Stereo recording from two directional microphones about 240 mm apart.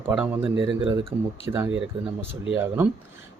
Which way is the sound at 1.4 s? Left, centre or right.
Centre.